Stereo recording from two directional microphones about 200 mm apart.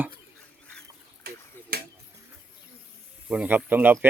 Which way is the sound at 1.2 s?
50° right (ahead or behind).